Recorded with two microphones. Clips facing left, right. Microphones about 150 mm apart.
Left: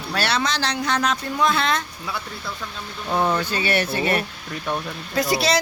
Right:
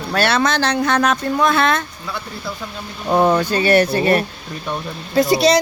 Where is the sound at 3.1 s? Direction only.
55° right (ahead or behind).